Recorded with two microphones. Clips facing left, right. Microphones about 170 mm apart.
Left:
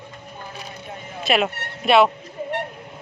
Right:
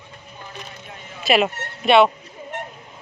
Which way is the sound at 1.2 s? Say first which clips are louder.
Right 2 dB; centre (ahead or behind).